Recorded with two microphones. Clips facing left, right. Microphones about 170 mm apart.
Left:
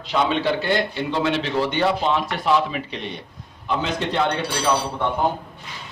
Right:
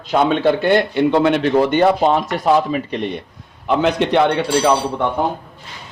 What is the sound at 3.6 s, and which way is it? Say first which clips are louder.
Speech: right 8 dB; 65° right (ahead or behind).